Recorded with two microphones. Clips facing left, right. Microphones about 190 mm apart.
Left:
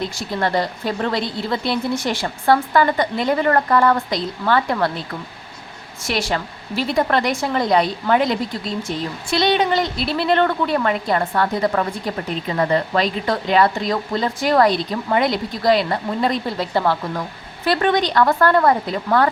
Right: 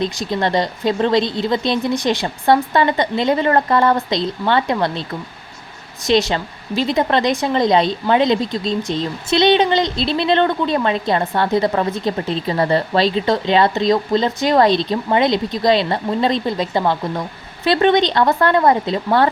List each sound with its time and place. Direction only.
0.0 s a woman's voice: 20° right (ahead or behind)
6.1 s a woman's voice: 20° right (ahead or behind)